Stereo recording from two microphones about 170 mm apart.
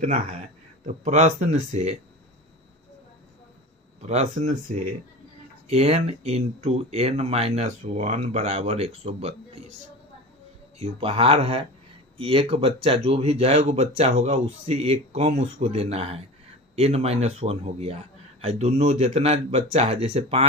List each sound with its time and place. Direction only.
0.0 s speech: 45° right (ahead or behind)
4.0 s speech: 40° right (ahead or behind)
10.8 s speech: 35° right (ahead or behind)